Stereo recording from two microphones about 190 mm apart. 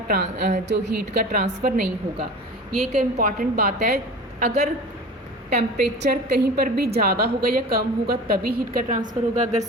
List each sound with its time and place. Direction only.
0.1 s a woman's voice: 55° right (ahead or behind)
2.9 s a woman's voice: 45° right (ahead or behind)
5.7 s a woman's voice: 55° right (ahead or behind)